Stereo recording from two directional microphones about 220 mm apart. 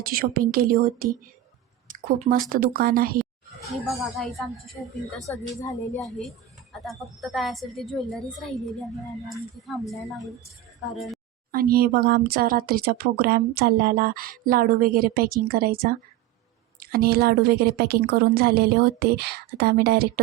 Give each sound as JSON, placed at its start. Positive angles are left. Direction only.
{"t": 0.0, "sound": "speech", "side_deg": -40}
{"t": 3.7, "sound": "a woman's voice", "side_deg": 0}
{"t": 11.5, "sound": "speech", "side_deg": -45}